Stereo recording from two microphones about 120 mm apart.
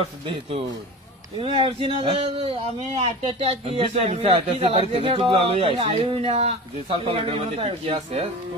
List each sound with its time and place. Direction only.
1.4 s speech: 50° right (ahead or behind)